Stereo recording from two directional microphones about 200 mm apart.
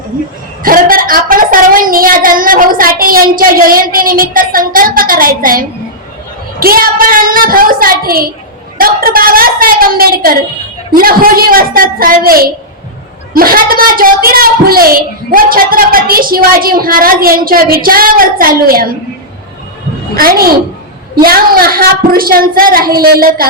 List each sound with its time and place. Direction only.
0.6 s speech: 45° right (ahead or behind)
20.1 s speech: 50° right (ahead or behind)